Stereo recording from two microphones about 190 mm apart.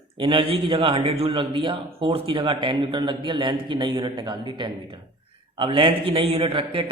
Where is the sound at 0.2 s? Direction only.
30° right (ahead or behind).